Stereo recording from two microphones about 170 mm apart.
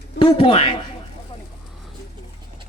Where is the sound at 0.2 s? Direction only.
35° left (ahead or behind).